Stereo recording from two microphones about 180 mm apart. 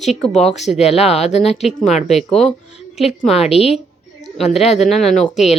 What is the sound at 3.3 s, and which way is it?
Speech, 35° left (ahead or behind).